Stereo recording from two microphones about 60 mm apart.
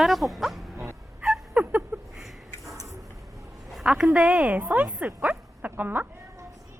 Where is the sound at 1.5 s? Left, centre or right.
Right.